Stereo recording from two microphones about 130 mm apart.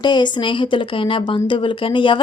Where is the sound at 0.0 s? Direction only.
35° left (ahead or behind).